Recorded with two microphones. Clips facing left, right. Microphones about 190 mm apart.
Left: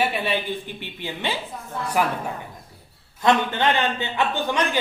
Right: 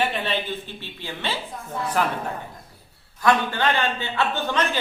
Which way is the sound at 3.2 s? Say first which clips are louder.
Left 1 dB; 20° left (ahead or behind).